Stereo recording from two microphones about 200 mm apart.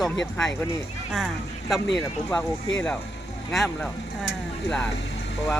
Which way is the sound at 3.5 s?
Centre (ahead or behind).